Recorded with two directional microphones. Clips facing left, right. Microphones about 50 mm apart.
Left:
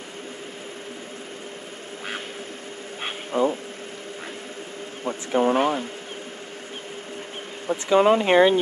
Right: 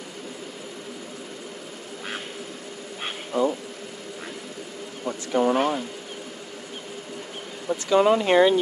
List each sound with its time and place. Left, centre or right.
3.3 s speech: left
5.0 s speech: left
7.6 s speech: left